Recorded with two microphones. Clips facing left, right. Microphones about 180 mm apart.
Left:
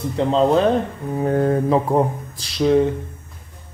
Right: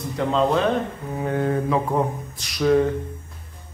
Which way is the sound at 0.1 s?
30° left (ahead or behind).